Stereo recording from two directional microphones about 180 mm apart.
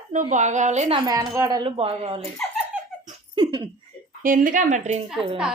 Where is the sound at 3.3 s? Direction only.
25° right (ahead or behind).